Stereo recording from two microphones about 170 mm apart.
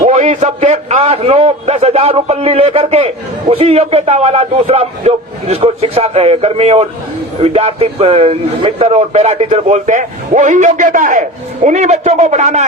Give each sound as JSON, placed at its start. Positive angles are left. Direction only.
{"t": 0.0, "sound": "a man's voice", "side_deg": -45}